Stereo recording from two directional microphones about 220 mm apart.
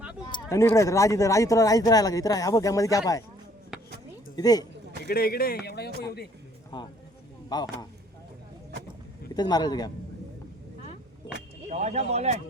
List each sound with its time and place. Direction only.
0.5 s speech: 10° left (ahead or behind)
3.7 s a sound: centre (ahead or behind)
4.4 s speech: 15° left (ahead or behind)
5.0 s speech: 45° left (ahead or behind)
6.7 s speech: 20° left (ahead or behind)
9.3 s speech: 20° left (ahead or behind)
11.7 s speech: 30° right (ahead or behind)